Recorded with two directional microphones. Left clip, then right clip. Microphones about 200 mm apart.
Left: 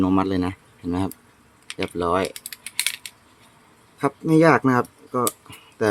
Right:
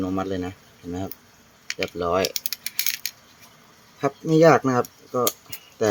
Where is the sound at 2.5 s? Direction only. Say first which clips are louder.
Left 1 dB; 20° right (ahead or behind).